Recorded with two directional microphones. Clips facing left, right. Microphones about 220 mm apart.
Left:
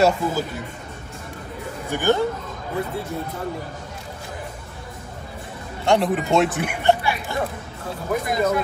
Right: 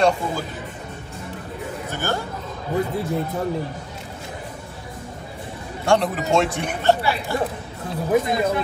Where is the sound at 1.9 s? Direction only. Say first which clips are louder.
Left 7 dB; 15° left (ahead or behind).